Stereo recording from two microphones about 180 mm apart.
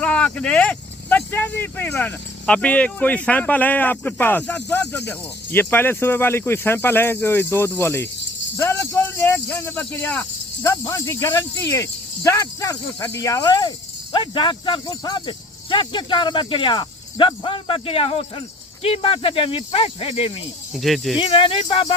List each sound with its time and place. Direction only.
0.0 s speech: 5° left (ahead or behind); by 20.3 s 30° left (ahead or behind)
20.7 s speech: centre (ahead or behind)
21.2 s speech: 30° left (ahead or behind)